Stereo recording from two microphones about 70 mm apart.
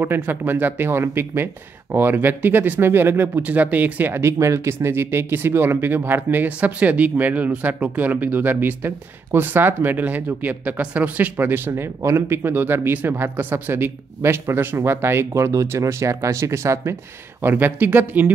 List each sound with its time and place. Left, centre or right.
0.0 s speech: right
11.3 s speech: right
17.4 s speech: right